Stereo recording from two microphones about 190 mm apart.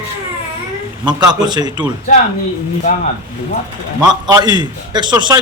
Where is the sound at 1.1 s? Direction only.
20° right (ahead or behind).